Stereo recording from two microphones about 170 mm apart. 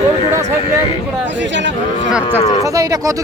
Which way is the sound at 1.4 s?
90° right.